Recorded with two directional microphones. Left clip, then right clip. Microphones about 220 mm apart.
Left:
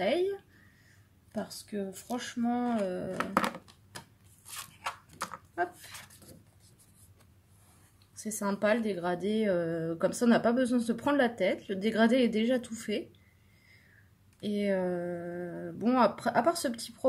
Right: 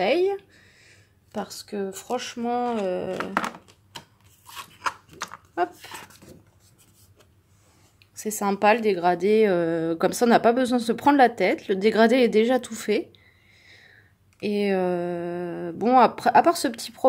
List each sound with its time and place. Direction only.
1.3 s speech: 35° right (ahead or behind)
5.5 s a sound: 35° right (ahead or behind)
8.1 s speech: 35° right (ahead or behind)
14.4 s speech: 40° right (ahead or behind)